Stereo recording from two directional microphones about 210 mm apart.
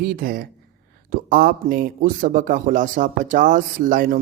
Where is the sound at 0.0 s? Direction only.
45° right (ahead or behind).